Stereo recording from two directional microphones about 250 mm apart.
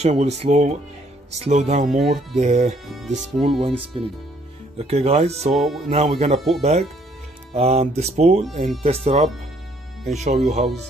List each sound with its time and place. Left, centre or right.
0.0 s speech: right
5.5 s speech: centre
5.9 s speech: right